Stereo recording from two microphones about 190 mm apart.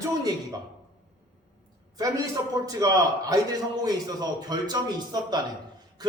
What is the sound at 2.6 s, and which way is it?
A man's voice, 20° right (ahead or behind).